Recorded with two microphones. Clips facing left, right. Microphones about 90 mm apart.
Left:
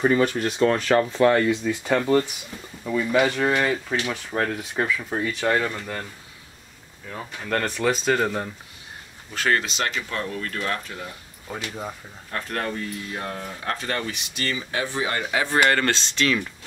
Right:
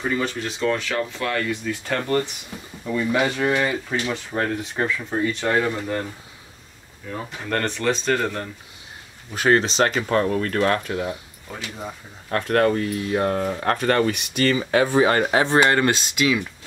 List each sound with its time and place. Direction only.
0.0 s speech: 45° left (ahead or behind); by 1.6 s 30° left (ahead or behind)
1.6 s speech: 15° left (ahead or behind)
5.6 s speech: 10° right (ahead or behind)
7.4 s speech: centre (ahead or behind)
9.3 s speech: 20° right (ahead or behind); by 11.1 s 80° right
12.3 s speech: 60° right (ahead or behind)
15.4 s speech: 20° right (ahead or behind)